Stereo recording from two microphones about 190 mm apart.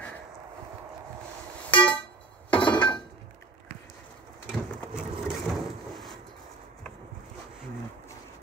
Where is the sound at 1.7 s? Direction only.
25° left (ahead or behind).